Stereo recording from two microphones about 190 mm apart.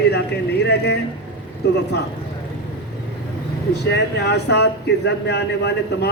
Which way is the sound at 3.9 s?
60° left (ahead or behind).